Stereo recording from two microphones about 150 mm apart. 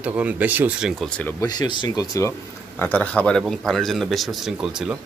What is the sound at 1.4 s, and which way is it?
Speech, 25° left (ahead or behind).